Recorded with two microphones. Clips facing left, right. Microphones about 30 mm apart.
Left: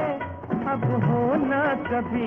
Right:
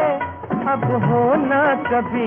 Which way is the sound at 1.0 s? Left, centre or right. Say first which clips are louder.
Right 6 dB; right.